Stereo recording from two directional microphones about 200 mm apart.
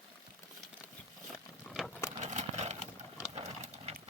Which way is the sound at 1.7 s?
15° left (ahead or behind).